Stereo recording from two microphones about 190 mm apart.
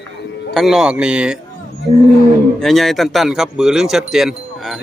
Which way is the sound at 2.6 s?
Centre (ahead or behind).